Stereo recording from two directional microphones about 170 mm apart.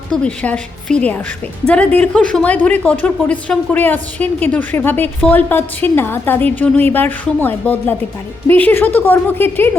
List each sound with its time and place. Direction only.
0.1 s speech: 5° left (ahead or behind)